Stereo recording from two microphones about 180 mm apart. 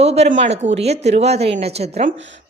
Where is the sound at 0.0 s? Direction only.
35° right (ahead or behind).